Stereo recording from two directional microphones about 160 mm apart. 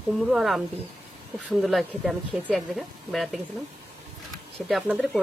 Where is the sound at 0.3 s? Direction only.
Centre (ahead or behind).